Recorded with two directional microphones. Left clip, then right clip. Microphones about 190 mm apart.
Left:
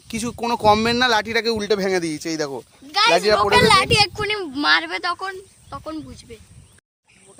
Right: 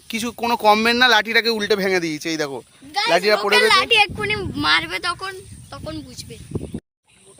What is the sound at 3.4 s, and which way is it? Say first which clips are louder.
Speech: left 1 dB; 40° left (ahead or behind).